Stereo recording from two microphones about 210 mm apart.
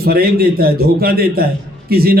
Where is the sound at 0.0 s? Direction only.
45° right (ahead or behind).